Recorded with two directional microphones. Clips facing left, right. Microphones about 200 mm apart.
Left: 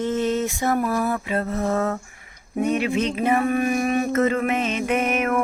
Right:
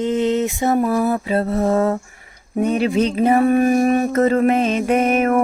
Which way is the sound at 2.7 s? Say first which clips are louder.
Right 6 dB; 35° right (ahead or behind).